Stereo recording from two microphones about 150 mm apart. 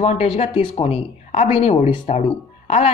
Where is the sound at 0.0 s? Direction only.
45° left (ahead or behind).